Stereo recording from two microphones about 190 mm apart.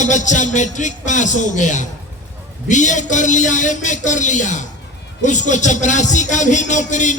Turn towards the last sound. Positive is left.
turn(degrees=40)  # may be behind; listen again after turning